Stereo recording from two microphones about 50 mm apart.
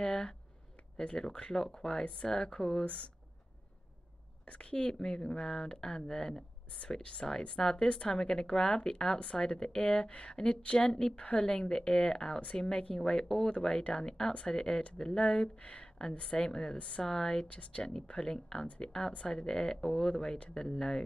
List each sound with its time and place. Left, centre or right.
0.0 s speech: centre
4.5 s speech: left
17.5 s speech: left